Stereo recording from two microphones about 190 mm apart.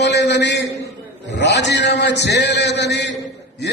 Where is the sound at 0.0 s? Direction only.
65° left (ahead or behind).